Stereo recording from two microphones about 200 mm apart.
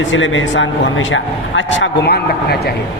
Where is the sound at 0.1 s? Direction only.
70° left (ahead or behind).